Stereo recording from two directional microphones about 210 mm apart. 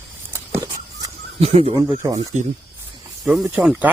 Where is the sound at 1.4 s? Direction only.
30° right (ahead or behind).